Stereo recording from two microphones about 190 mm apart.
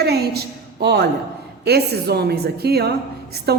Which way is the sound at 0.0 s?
60° right (ahead or behind).